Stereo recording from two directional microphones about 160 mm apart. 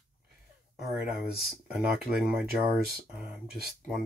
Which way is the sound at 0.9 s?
5° right (ahead or behind).